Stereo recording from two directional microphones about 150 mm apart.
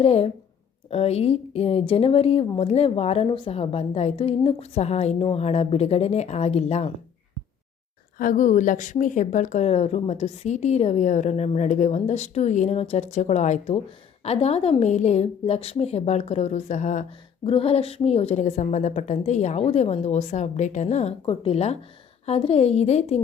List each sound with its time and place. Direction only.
0.0 s a woman's voice: 40° left (ahead or behind)
8.2 s a woman's voice: 60° left (ahead or behind)
9.6 s speech: 45° left (ahead or behind)
17.4 s speech: 35° left (ahead or behind)